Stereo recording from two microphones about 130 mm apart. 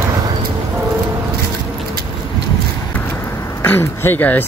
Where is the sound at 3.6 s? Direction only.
15° left (ahead or behind).